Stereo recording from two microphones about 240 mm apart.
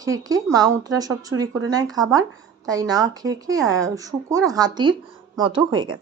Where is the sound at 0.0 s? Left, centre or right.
Centre.